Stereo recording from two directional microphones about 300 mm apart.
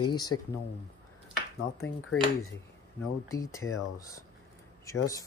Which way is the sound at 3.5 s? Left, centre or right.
Centre.